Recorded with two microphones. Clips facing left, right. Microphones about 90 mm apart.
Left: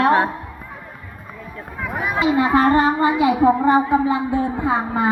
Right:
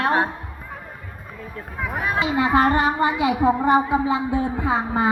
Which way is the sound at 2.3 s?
20° left (ahead or behind).